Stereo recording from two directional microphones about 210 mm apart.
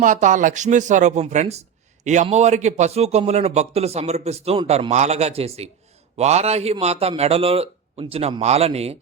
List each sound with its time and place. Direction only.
0.0 s a man's voice: 35° right (ahead or behind)